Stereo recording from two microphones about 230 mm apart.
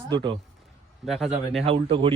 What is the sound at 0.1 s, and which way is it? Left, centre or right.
Speech, right.